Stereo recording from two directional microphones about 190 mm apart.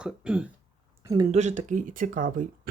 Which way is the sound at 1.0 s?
20° right (ahead or behind).